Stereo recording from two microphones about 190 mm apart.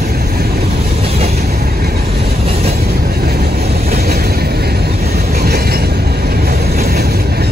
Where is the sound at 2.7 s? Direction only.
55° right (ahead or behind).